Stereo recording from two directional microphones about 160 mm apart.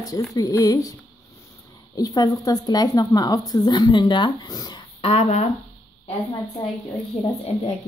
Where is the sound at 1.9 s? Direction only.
25° left (ahead or behind).